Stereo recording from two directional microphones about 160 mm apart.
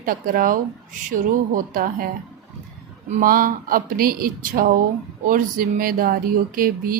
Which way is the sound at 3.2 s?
60° right (ahead or behind).